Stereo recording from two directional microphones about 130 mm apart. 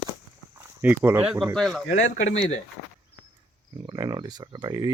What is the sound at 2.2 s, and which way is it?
Speech, 60° left (ahead or behind).